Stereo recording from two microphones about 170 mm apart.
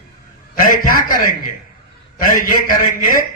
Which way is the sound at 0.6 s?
55° left (ahead or behind).